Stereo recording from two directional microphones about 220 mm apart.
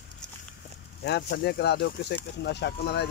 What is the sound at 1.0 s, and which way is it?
Speech, 50° left (ahead or behind).